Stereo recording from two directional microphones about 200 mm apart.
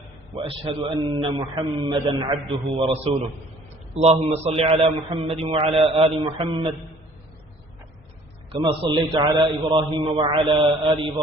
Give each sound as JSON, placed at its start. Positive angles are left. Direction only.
{"t": 0.3, "sound": "a man's voice", "side_deg": -25}
{"t": 8.5, "sound": "a man's voice", "side_deg": -25}